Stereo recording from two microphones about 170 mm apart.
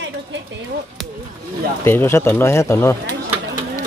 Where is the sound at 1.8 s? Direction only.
15° left (ahead or behind).